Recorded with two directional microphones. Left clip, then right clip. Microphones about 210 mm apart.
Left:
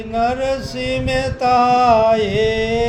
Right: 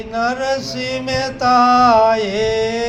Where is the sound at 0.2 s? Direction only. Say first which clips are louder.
Even; 50° left (ahead or behind).